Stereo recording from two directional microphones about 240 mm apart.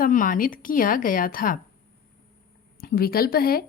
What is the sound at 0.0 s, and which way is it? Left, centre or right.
Speech, left.